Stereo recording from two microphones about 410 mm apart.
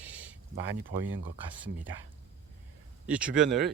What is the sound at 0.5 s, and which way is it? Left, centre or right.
Speech, right.